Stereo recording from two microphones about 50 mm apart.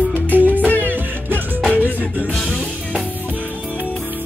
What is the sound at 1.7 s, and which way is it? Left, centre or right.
Music, left.